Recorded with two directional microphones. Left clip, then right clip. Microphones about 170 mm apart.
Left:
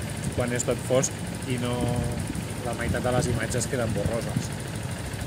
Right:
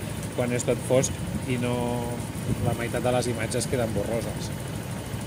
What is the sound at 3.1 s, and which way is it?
Speech, 15° right (ahead or behind).